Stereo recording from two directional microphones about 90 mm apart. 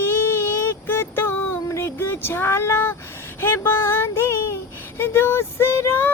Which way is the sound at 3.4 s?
25° left (ahead or behind).